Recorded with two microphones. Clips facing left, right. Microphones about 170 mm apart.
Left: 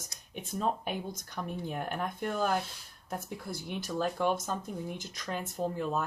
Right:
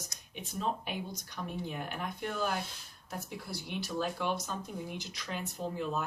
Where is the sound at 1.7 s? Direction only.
50° left (ahead or behind).